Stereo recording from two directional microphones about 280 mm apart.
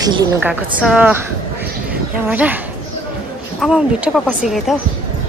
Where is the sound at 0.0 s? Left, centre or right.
Centre.